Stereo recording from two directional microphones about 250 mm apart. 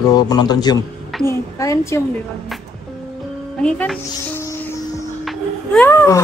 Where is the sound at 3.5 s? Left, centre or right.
Centre.